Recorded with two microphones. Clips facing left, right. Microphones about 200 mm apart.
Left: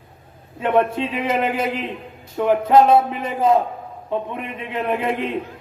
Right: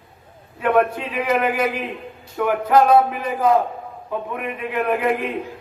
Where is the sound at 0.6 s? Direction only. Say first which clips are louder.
Even; 25° left (ahead or behind).